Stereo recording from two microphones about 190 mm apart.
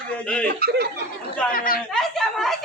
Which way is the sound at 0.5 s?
55° right (ahead or behind).